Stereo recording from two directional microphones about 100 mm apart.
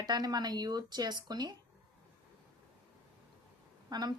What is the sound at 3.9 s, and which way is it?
Speech, 45° right (ahead or behind).